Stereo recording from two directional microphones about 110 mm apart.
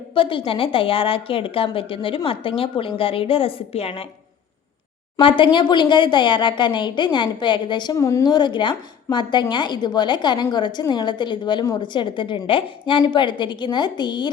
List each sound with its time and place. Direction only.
0.1 s a woman's voice: 55° left (ahead or behind)
5.2 s a woman's voice: 50° left (ahead or behind)
7.9 s speech: 25° left (ahead or behind)
8.3 s a woman's voice: 40° left (ahead or behind)